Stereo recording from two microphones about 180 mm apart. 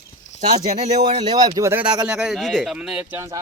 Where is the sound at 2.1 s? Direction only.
Centre (ahead or behind).